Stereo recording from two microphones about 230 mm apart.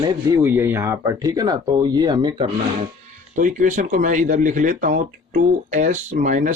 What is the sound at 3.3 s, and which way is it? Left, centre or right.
Speech, right.